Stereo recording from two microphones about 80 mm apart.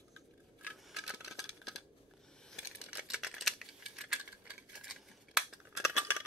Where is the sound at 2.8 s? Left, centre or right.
Centre.